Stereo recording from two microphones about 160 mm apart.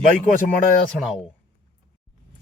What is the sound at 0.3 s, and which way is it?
Speech, 55° left (ahead or behind).